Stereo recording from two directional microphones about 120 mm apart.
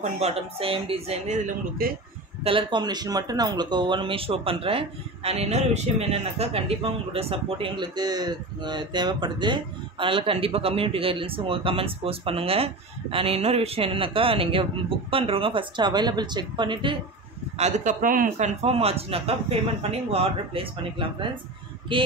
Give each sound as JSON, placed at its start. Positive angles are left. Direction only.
{"t": 0.0, "sound": "a man's voice", "side_deg": -60}
{"t": 2.4, "sound": "speech", "side_deg": -45}
{"t": 17.6, "sound": "a man's voice", "side_deg": -75}